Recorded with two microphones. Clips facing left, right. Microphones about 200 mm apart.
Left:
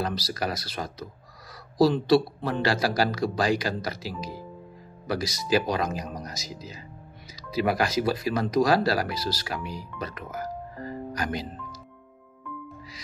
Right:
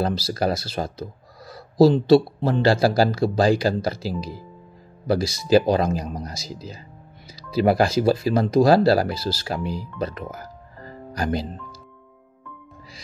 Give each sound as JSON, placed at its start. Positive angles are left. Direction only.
{"t": 0.0, "sound": "speech", "side_deg": -30}
{"t": 1.5, "sound": "a sound", "side_deg": -25}
{"t": 2.0, "sound": "speech", "side_deg": -25}